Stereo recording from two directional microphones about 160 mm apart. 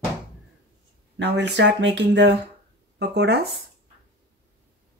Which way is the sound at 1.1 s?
90° right.